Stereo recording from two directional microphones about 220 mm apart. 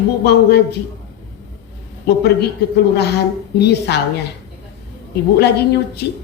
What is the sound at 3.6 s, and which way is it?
Speech, 50° left (ahead or behind).